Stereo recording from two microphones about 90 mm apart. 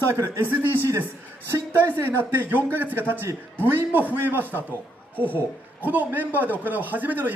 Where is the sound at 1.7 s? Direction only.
20° right (ahead or behind).